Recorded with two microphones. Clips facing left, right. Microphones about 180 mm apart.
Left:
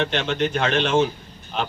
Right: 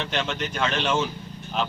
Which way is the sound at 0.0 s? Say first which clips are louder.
Left 6 dB; 55° left (ahead or behind).